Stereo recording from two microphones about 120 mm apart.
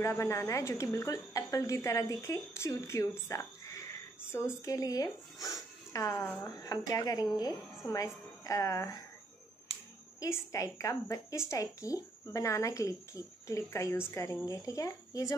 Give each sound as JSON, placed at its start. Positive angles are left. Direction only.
{"t": 0.0, "sound": "a woman's voice", "side_deg": 25}
{"t": 10.2, "sound": "a woman's voice", "side_deg": 25}